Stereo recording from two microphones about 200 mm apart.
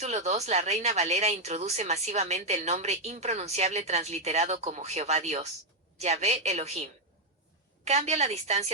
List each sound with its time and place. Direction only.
0.0 s speech: 35° right (ahead or behind)
7.9 s speech: 35° right (ahead or behind)